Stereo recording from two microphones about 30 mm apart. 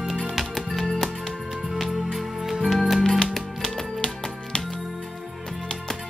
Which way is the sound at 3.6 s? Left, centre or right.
Left.